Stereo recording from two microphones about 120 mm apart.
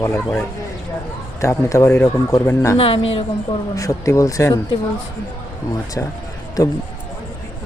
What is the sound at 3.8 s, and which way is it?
Speech, 25° left (ahead or behind).